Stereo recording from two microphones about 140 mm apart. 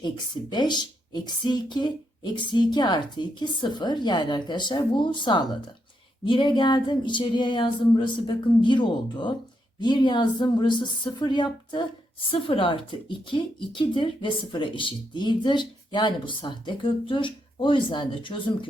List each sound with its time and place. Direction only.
0.5 s speech: 30° left (ahead or behind)